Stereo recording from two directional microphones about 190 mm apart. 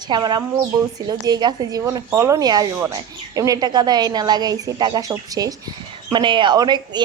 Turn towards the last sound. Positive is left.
turn(degrees=-20)  # may be behind; listen again after turning